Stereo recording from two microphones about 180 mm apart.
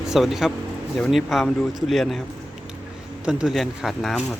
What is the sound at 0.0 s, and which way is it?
Speech, centre (ahead or behind).